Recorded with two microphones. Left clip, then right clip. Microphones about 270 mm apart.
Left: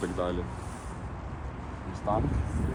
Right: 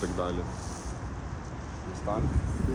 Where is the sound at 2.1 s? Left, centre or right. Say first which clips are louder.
Left 3 dB; centre.